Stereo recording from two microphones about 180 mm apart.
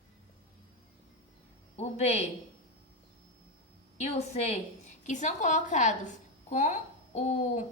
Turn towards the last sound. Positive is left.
turn(degrees=40)  # may be behind; listen again after turning